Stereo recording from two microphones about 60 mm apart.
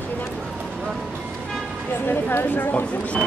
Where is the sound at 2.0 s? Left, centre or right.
Left.